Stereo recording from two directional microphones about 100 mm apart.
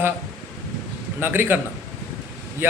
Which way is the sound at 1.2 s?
20° right (ahead or behind).